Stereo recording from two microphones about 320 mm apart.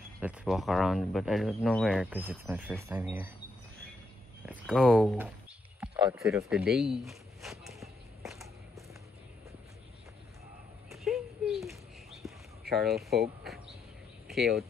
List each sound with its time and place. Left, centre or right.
0.2 s speech: centre
4.5 s speech: centre
6.7 s walk: centre
10.9 s a sound: centre
14.2 s speech: centre